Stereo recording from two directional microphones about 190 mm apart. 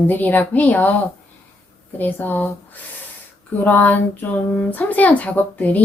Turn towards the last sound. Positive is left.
turn(degrees=10)  # may be behind; listen again after turning